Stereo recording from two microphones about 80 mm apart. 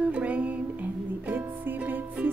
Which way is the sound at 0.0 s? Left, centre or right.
Centre.